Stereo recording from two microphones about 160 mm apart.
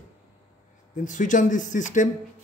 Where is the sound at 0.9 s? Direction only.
50° left (ahead or behind).